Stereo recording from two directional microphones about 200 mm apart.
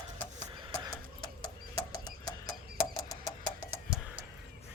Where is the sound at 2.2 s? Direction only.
15° left (ahead or behind).